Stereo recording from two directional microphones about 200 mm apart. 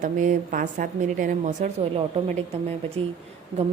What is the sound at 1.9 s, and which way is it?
Speech, 30° right (ahead or behind).